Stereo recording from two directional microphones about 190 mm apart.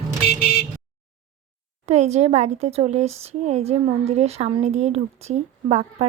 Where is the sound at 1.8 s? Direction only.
35° right (ahead or behind).